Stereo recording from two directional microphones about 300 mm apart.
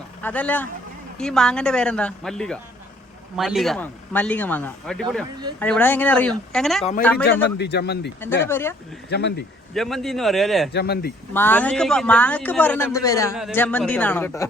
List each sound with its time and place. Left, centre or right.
0.2 s a man's voice: centre
7.4 s a man's voice: left
8.4 s speech: centre
9.0 s a man's voice: left
9.7 s a man's voice: centre
10.7 s a man's voice: left
11.3 s a man's voice: centre